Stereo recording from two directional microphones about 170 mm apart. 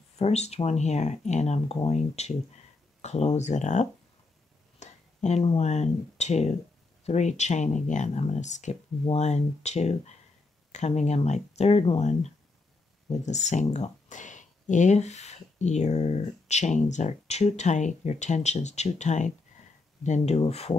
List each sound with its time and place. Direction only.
0.2 s speech: 40° left (ahead or behind)